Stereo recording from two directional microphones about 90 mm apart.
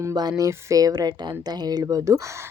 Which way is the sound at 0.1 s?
50° right (ahead or behind).